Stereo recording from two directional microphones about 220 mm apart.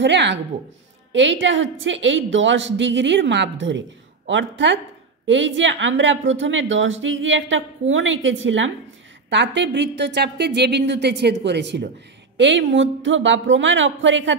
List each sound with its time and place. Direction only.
0.0 s a woman's voice: 55° right (ahead or behind)